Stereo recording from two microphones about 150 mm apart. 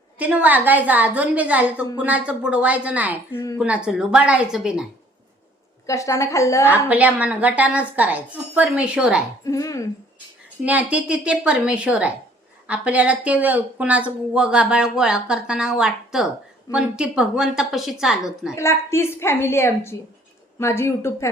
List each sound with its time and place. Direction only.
0.2 s speech: 10° right (ahead or behind)
3.3 s a woman's voice: 20° left (ahead or behind)
3.6 s speech: 5° right (ahead or behind)
5.8 s a woman's voice: 20° left (ahead or behind)
6.8 s speech: 10° right (ahead or behind)
9.4 s a woman's voice: 20° left (ahead or behind)
10.6 s speech: 10° right (ahead or behind)
18.5 s a woman's voice: 20° left (ahead or behind)